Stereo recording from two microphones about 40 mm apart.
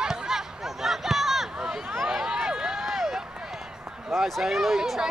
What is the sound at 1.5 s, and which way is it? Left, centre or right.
Run, centre.